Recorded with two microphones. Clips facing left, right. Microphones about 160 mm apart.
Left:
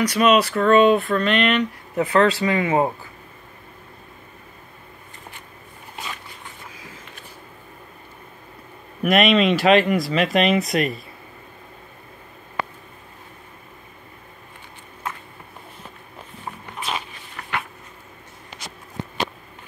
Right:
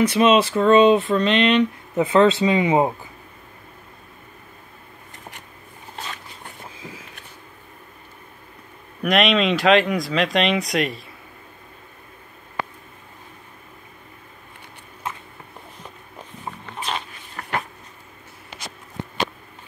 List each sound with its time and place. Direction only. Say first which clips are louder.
0.0 s speech: right 1 dB; 25° right (ahead or behind)
9.0 s speech: left 2 dB; centre (ahead or behind)
17.4 s a sound: right 2 dB; 40° right (ahead or behind)